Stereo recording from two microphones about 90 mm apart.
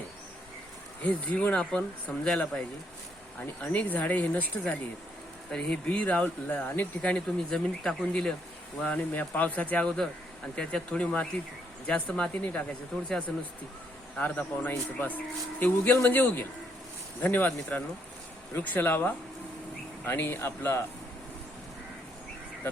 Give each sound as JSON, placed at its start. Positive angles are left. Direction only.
{"t": 1.0, "sound": "speech", "side_deg": 15}
{"t": 3.6, "sound": "speech", "side_deg": 15}
{"t": 5.5, "sound": "speech", "side_deg": 5}